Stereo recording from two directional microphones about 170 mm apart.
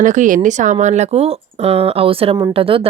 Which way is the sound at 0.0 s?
45° right (ahead or behind).